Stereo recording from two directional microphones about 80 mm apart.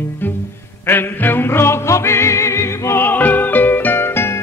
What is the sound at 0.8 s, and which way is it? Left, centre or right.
Music, left.